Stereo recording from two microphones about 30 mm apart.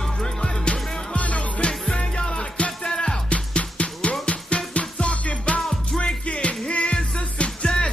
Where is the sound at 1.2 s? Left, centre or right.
Left.